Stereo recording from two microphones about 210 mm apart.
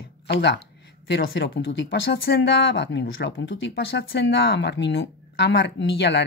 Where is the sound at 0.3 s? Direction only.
55° left (ahead or behind).